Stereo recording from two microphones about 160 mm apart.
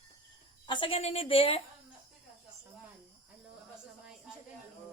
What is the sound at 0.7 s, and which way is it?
Speech, 30° left (ahead or behind).